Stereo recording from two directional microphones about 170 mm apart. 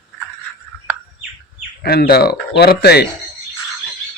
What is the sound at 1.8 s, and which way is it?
Speech, 65° left (ahead or behind).